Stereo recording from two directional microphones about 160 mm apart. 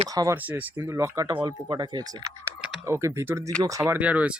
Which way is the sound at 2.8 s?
15° right (ahead or behind).